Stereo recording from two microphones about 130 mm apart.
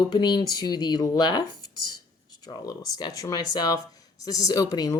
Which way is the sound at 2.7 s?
25° left (ahead or behind).